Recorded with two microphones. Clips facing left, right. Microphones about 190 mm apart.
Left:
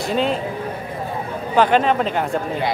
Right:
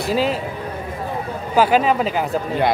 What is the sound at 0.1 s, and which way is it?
Speech, 5° right (ahead or behind).